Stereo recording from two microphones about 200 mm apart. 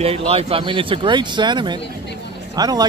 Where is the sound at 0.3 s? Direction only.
30° right (ahead or behind).